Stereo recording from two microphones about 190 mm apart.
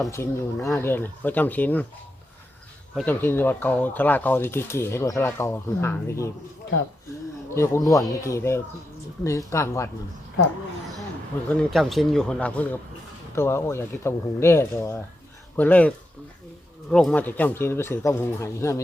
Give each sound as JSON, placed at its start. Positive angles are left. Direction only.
{"t": 0.0, "sound": "speech", "side_deg": 15}
{"t": 2.9, "sound": "speech", "side_deg": 5}
{"t": 7.5, "sound": "speech", "side_deg": 15}
{"t": 7.9, "sound": "a man's voice", "side_deg": 0}
{"t": 8.2, "sound": "speech", "side_deg": 15}
{"t": 11.4, "sound": "a man's voice", "side_deg": 0}
{"t": 16.9, "sound": "speech", "side_deg": 5}